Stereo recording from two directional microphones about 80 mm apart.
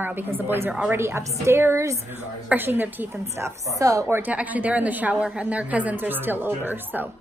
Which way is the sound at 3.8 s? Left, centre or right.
Right.